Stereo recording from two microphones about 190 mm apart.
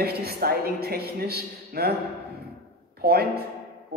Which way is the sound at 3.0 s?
55° right (ahead or behind).